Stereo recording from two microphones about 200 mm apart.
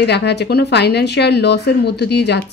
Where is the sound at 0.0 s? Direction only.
60° left (ahead or behind).